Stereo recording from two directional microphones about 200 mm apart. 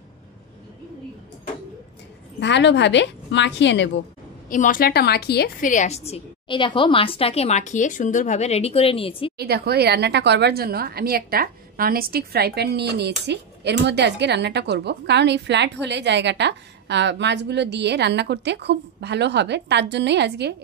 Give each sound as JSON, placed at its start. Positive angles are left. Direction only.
{"t": 2.4, "sound": "a woman's voice", "side_deg": 60}
{"t": 4.5, "sound": "a woman's voice", "side_deg": 40}
{"t": 5.7, "sound": "a woman's voice", "side_deg": 35}
{"t": 9.4, "sound": "a woman's voice", "side_deg": -55}